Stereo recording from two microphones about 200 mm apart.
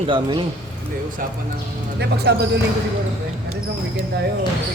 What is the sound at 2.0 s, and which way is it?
Speech, 55° right (ahead or behind).